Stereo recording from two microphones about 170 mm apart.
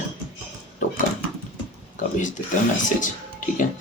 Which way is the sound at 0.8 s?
45° left (ahead or behind).